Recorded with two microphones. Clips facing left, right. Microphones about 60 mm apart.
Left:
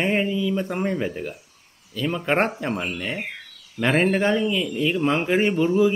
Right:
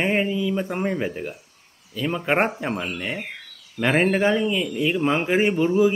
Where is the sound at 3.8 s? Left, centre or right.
Centre.